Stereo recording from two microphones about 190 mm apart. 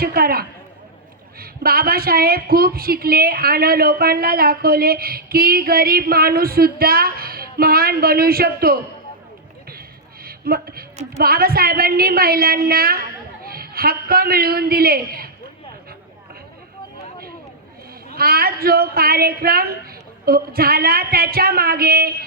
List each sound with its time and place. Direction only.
0.0 s a woman's voice: 50° right (ahead or behind)
10.2 s a woman's voice: 55° right (ahead or behind)
18.1 s a woman's voice: 50° right (ahead or behind)